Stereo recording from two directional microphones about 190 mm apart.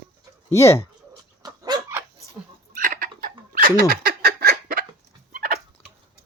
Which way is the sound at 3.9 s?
55° right (ahead or behind).